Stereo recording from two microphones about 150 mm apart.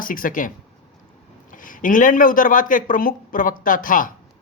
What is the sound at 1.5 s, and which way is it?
Speech, 65° left (ahead or behind).